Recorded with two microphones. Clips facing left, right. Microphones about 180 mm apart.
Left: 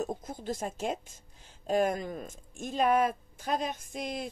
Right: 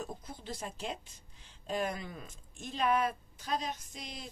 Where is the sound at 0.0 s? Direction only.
45° left (ahead or behind).